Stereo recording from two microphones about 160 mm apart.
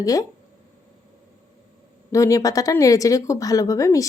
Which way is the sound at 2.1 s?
20° left (ahead or behind).